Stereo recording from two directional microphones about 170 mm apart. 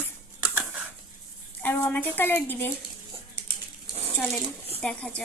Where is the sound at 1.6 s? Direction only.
10° left (ahead or behind).